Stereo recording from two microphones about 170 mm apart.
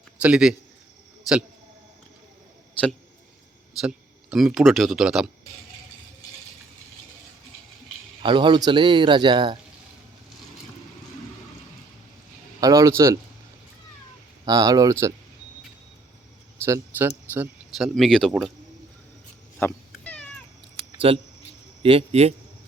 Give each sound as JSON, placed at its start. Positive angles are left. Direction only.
{"t": 0.2, "sound": "speech", "side_deg": -5}
{"t": 3.8, "sound": "speech", "side_deg": -5}
{"t": 8.2, "sound": "speech", "side_deg": -30}
{"t": 12.5, "sound": "speech", "side_deg": -20}
{"t": 14.4, "sound": "speech", "side_deg": -20}
{"t": 16.6, "sound": "speech", "side_deg": -15}
{"t": 17.7, "sound": "speech", "side_deg": 0}
{"t": 19.5, "sound": "cat", "side_deg": 10}
{"t": 21.1, "sound": "a man's voice", "side_deg": -35}